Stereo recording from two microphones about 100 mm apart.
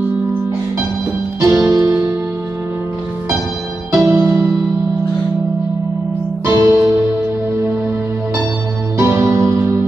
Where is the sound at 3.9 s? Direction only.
35° right (ahead or behind).